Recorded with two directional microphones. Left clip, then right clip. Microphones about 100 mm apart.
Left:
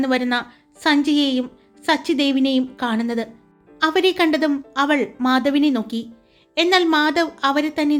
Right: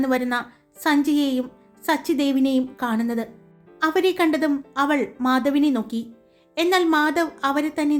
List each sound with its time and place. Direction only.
0.0 s a woman's voice: 30° left (ahead or behind)